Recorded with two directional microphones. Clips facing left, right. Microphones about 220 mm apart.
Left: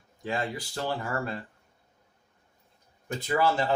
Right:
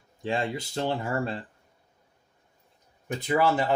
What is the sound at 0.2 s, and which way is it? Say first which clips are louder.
Speech: right 3 dB; 25° right (ahead or behind).